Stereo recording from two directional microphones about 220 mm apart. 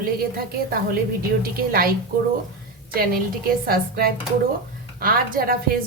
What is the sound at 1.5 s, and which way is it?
Speech, 45° right (ahead or behind).